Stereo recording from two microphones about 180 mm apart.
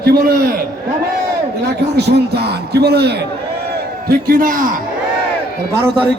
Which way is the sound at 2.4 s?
60° right (ahead or behind).